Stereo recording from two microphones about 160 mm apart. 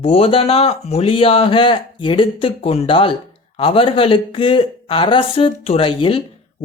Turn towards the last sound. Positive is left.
turn(degrees=35)  # may be behind; listen again after turning